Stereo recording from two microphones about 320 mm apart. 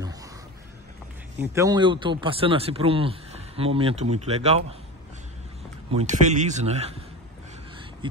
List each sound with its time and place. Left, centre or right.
0.0 s a sound: centre
1.4 s speech: centre
5.9 s a man's voice: right
8.0 s speech: centre